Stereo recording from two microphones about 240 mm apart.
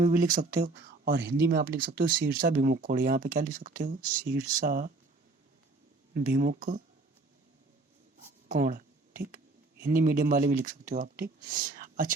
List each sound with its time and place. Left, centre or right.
0.0 s speech: right
6.1 s speech: right
8.4 s a sound: right
9.8 s speech: right